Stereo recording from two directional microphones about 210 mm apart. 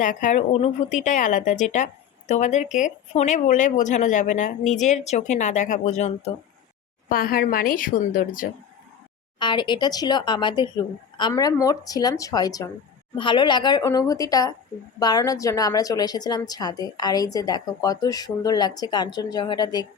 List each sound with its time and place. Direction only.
0.0 s speech: 35° left (ahead or behind)
7.1 s a woman's voice: 45° left (ahead or behind)
9.4 s a woman's voice: 20° left (ahead or behind)